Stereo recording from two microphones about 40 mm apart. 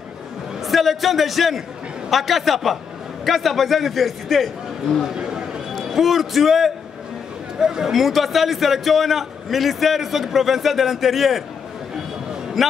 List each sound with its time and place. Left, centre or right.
0.6 s a man's voice: centre
5.1 s a sound: centre
5.9 s a man's voice: centre
12.6 s speech: centre